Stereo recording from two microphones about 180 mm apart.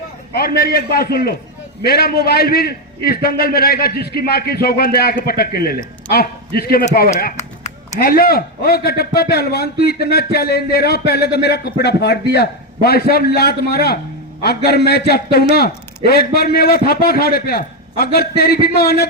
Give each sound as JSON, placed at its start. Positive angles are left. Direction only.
{"t": 0.3, "sound": "a man's voice", "side_deg": 55}
{"t": 7.9, "sound": "a man's voice", "side_deg": 55}